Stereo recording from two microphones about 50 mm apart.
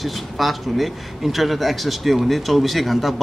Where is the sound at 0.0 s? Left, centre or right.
Centre.